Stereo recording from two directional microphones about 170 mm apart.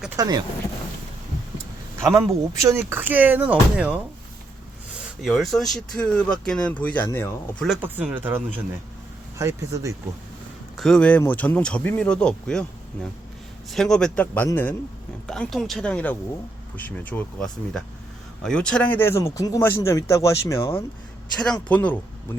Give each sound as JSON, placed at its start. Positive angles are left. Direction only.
{"t": 0.2, "sound": "speech", "side_deg": -25}
{"t": 2.0, "sound": "speech", "side_deg": -15}
{"t": 5.2, "sound": "speech", "side_deg": 0}
{"t": 7.8, "sound": "speech", "side_deg": -10}
{"t": 10.8, "sound": "speech", "side_deg": 5}
{"t": 15.3, "sound": "speech", "side_deg": 0}